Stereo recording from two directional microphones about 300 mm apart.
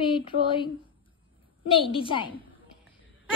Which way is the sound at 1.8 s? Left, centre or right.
Centre.